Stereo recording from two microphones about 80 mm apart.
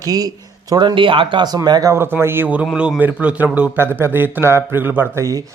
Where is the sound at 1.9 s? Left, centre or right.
Right.